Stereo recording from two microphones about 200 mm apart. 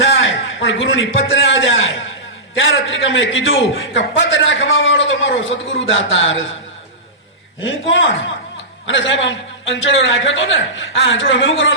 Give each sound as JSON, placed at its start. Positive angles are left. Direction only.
{"t": 0.0, "sound": "a man's voice", "side_deg": 70}
{"t": 7.6, "sound": "a man's voice", "side_deg": 70}